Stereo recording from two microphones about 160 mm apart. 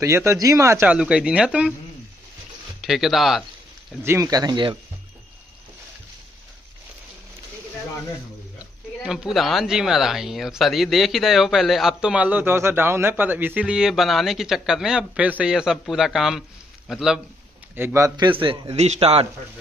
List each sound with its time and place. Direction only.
0.0 s speech: 20° right (ahead or behind)
2.8 s speech: centre (ahead or behind)
4.0 s speech: 20° right (ahead or behind)
9.0 s speech: 5° right (ahead or behind)
17.7 s a man's voice: 15° right (ahead or behind); by 19.2 s 40° right (ahead or behind)